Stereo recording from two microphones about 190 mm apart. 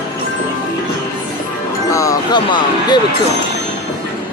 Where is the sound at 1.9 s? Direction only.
15° left (ahead or behind).